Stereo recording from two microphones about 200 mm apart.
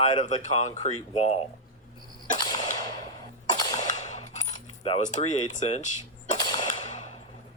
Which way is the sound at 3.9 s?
35° left (ahead or behind).